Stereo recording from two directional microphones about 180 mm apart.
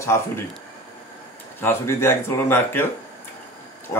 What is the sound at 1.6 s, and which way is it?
A man's voice, 15° left (ahead or behind).